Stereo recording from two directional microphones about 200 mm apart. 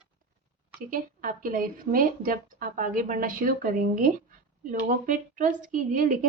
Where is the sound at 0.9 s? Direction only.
45° right (ahead or behind).